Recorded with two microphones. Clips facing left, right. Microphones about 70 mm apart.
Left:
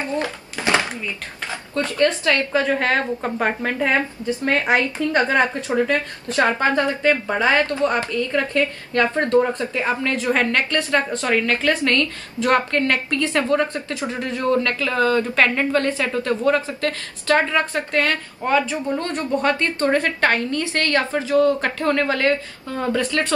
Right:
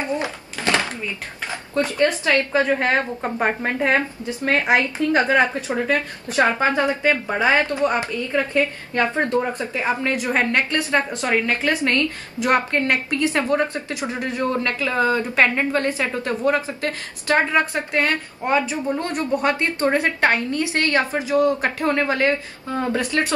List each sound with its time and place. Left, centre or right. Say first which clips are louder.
1.7 s a woman's voice: even; centre